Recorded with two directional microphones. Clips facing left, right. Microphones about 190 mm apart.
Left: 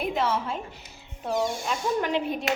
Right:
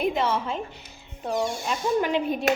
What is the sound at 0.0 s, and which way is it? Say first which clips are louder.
Speech: right 2 dB; centre (ahead or behind).